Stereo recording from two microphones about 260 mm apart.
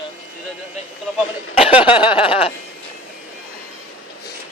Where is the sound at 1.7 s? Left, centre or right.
Centre.